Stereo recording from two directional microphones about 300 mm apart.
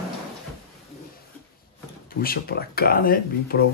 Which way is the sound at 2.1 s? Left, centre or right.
Left.